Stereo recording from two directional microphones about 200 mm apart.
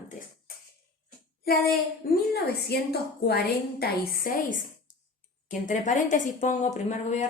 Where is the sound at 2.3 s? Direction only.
50° left (ahead or behind).